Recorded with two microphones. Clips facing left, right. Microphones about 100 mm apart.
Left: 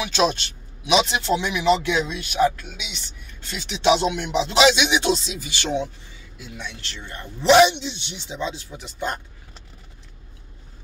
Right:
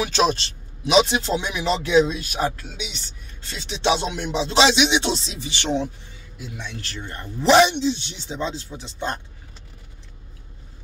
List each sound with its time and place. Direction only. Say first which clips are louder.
0.0 s a man's voice: right 1 dB; 35° right (ahead or behind)
7.4 s speech: left 1 dB; centre (ahead or behind)
7.7 s speech: right 9 dB; 40° right (ahead or behind); by 9.1 s 25° right (ahead or behind)